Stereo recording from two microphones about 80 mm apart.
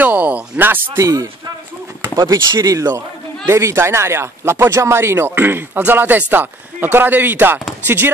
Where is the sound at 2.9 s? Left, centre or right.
Right.